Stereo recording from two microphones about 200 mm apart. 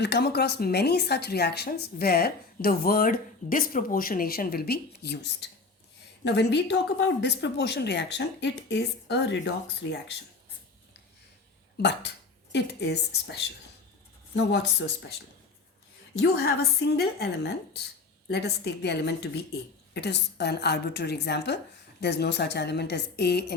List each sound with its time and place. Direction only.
0.0 s a woman's voice: 55° left (ahead or behind)
11.8 s speech: 60° left (ahead or behind)
16.2 s a woman's voice: 50° left (ahead or behind)